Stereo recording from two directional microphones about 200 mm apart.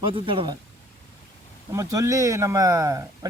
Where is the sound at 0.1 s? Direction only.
25° right (ahead or behind).